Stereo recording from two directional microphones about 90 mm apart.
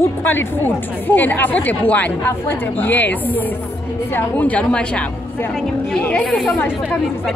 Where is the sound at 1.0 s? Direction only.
20° left (ahead or behind).